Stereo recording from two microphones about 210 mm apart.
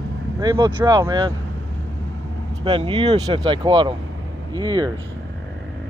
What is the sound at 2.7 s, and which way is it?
Speech, 25° right (ahead or behind).